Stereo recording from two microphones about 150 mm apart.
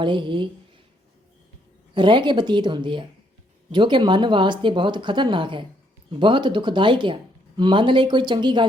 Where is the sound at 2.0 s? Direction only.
35° right (ahead or behind).